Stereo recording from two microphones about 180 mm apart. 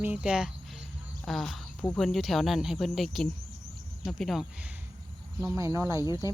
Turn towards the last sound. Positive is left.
turn(degrees=20)  # may be behind; listen again after turning